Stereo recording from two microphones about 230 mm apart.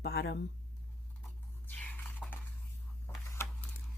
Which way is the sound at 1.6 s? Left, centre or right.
Centre.